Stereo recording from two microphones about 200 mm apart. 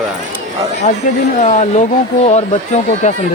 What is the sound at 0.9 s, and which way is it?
Speech, 30° left (ahead or behind).